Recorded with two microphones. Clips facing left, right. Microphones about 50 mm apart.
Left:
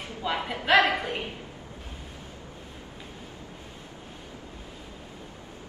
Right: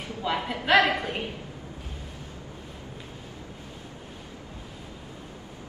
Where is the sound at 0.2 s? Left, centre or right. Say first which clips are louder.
Right 1 dB; centre.